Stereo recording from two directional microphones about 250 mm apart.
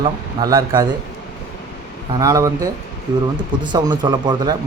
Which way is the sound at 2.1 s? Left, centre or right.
Centre.